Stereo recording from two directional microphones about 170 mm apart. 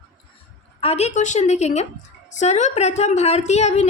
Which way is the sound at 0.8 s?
40° left (ahead or behind).